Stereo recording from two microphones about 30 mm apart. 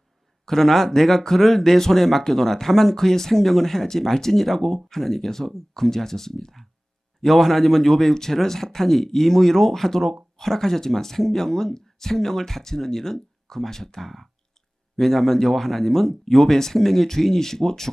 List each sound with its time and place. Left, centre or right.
0.5 s speech: centre
7.2 s speech: centre
8.8 s speech: centre
15.0 s speech: centre